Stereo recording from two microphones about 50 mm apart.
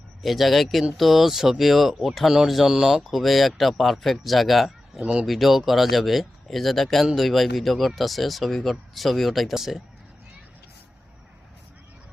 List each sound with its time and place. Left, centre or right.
0.2 s speech: centre
4.9 s speech: centre
5.2 s speech: centre